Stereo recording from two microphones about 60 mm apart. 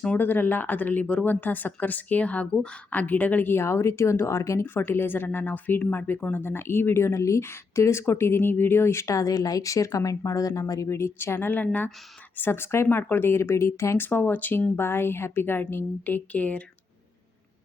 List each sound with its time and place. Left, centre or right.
0.2 s speech: left
4.9 s speech: left
8.4 s speech: left
9.0 s speech: left
10.8 s speech: left
12.4 s speech: left